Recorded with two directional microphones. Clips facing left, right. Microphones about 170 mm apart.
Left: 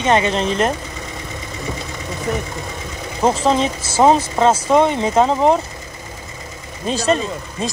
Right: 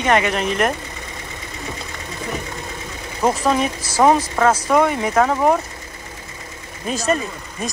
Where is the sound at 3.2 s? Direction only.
25° left (ahead or behind).